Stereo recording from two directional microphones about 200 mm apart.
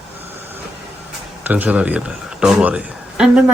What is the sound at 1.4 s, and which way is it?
A man's voice, 10° right (ahead or behind).